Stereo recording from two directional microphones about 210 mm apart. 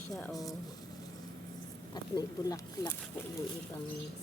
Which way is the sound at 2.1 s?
20° left (ahead or behind).